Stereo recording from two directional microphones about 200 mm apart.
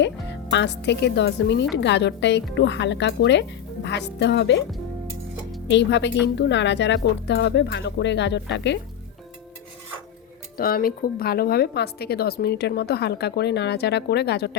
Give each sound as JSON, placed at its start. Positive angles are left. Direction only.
{"t": 0.5, "sound": "a woman's voice", "side_deg": 60}
{"t": 5.6, "sound": "a woman's voice", "side_deg": 60}
{"t": 10.6, "sound": "a woman's voice", "side_deg": 45}